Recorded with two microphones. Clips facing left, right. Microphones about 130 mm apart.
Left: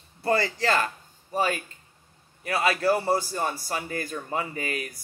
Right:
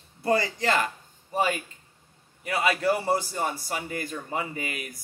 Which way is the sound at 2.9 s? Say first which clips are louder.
Left 2 dB; 30° left (ahead or behind).